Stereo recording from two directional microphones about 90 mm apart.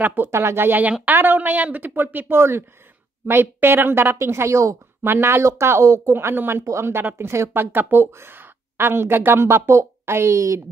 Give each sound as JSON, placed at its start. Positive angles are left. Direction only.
{"t": 0.0, "sound": "speech", "side_deg": -25}